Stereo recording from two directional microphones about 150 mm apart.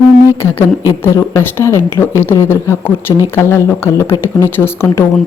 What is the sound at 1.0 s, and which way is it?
Speech, 15° left (ahead or behind).